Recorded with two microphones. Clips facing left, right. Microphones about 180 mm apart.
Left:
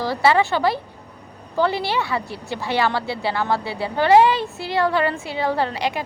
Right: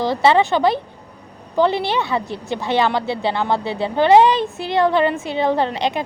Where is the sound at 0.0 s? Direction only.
20° right (ahead or behind).